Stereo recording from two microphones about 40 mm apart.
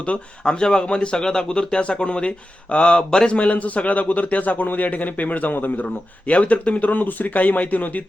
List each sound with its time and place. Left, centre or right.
0.0 s speech: left
3.1 s speech: centre
3.3 s speech: left
5.8 s speech: left